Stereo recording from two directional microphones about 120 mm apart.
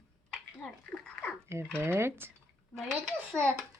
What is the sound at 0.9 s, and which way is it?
Speech, 5° left (ahead or behind).